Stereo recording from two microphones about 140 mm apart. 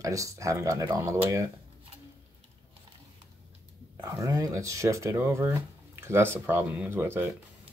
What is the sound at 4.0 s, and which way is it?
Speech, 25° right (ahead or behind).